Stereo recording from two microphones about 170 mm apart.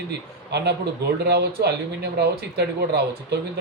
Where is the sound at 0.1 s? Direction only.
75° right (ahead or behind).